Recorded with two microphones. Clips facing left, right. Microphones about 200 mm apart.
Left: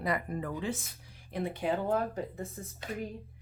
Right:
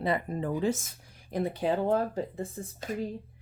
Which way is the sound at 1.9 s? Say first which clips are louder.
Right 3 dB; 30° right (ahead or behind).